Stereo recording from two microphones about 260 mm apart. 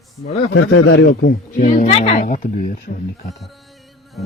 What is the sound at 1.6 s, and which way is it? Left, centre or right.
Speech, left.